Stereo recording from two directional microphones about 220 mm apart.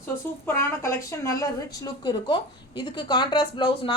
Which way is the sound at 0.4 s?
10° left (ahead or behind).